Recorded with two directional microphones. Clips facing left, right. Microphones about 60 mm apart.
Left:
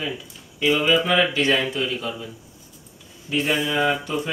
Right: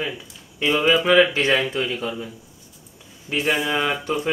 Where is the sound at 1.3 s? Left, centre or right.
Right.